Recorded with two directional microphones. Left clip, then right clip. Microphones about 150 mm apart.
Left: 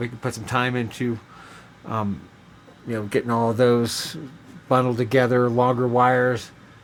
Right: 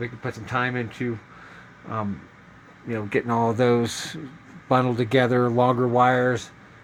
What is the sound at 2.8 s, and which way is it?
Speech, 5° left (ahead or behind).